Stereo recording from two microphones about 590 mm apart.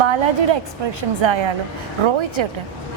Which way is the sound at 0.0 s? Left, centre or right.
Right.